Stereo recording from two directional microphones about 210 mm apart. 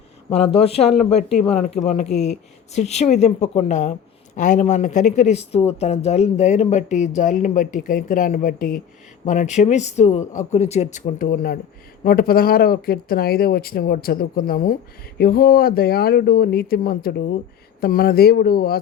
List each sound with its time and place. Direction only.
0.3 s speech: 30° left (ahead or behind); by 18.8 s 45° left (ahead or behind)